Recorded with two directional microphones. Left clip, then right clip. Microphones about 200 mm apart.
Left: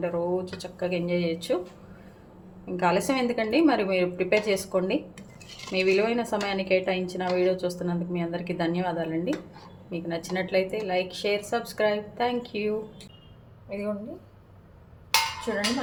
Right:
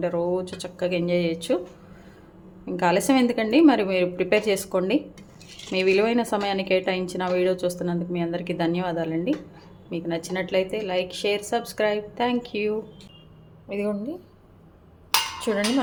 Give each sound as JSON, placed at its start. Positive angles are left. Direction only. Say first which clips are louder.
{"t": 0.0, "sound": "a woman's voice", "louder": "right 3 dB", "side_deg": -25}
{"t": 2.7, "sound": "a woman's voice", "louder": "right 3 dB", "side_deg": -25}
{"t": 13.7, "sound": "a woman's voice", "louder": "right 4 dB", "side_deg": -50}
{"t": 15.5, "sound": "speech", "louder": "right 4 dB", "side_deg": -60}